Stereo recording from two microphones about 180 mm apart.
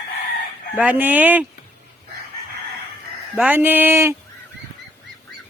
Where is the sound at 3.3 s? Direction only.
10° right (ahead or behind).